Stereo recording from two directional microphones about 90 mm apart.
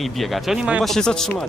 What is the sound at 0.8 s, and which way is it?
Speech, 5° left (ahead or behind).